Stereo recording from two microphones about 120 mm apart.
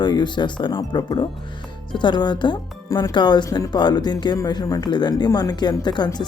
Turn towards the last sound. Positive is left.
turn(degrees=35)  # may be behind; listen again after turning